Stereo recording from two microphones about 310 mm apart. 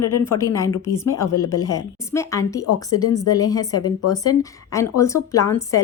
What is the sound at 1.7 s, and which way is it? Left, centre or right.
Speech, centre.